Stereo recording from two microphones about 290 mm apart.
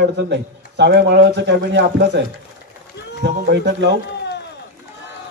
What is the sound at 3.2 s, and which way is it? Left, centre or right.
Speech, right.